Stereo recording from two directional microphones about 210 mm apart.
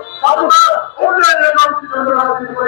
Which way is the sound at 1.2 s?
15° left (ahead or behind).